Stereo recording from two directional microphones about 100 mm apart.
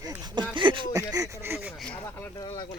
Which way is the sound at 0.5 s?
55° right (ahead or behind).